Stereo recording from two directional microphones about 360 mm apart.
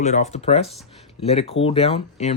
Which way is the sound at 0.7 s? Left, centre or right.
Centre.